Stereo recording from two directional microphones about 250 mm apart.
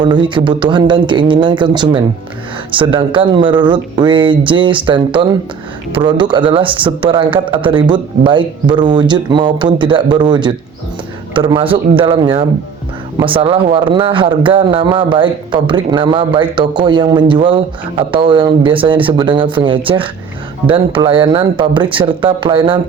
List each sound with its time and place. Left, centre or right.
0.0 s a man's voice: centre